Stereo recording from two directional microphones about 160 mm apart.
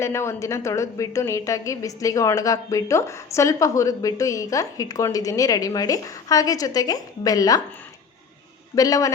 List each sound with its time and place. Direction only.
0.0 s a woman's voice: 15° left (ahead or behind)
8.7 s a woman's voice: 20° left (ahead or behind)